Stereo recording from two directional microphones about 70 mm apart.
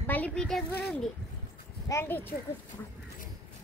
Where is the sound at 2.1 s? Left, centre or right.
Left.